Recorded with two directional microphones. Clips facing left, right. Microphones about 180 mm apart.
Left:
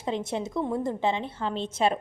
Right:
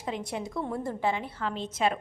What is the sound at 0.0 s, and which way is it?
A woman's voice, 25° left (ahead or behind).